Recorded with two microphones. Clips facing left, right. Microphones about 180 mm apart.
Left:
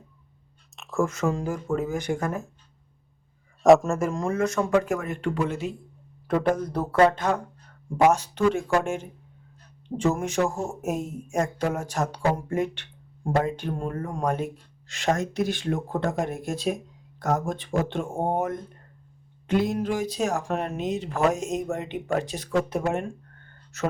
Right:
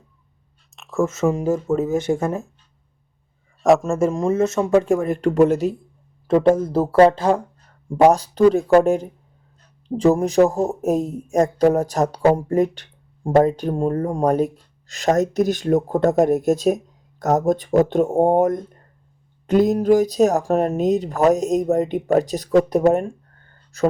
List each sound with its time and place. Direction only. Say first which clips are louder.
0.8 s a sound: right 4 dB; centre (ahead or behind)
1.0 s speech: right 8 dB; 20° right (ahead or behind)
3.6 s a man's voice: even; centre (ahead or behind)
3.9 s speech: right 7 dB; 25° right (ahead or behind); by 5.7 s 40° right (ahead or behind)
6.2 s speech: right 8 dB; 25° right (ahead or behind)